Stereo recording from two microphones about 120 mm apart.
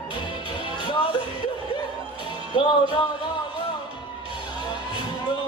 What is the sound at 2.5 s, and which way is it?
Music, 45° left (ahead or behind).